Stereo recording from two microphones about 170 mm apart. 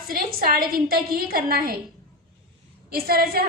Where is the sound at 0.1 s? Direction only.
60° right (ahead or behind).